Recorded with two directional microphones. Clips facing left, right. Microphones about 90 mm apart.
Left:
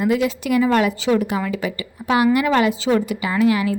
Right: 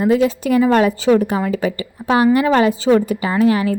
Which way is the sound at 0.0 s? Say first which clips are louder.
Right 4 dB; 30° right (ahead or behind).